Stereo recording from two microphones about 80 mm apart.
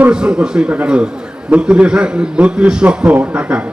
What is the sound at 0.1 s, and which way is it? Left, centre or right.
A man's voice, centre.